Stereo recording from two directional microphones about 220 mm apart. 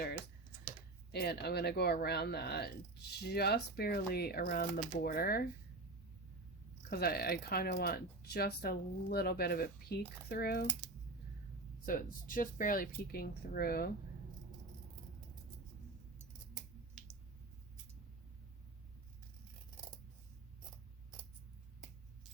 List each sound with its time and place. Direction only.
1.1 s speech: 45° left (ahead or behind)
6.9 s speech: 45° left (ahead or behind)
11.9 s speech: 40° left (ahead or behind)